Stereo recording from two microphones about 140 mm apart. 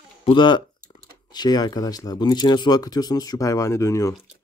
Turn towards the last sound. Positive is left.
turn(degrees=20)  # may be behind; listen again after turning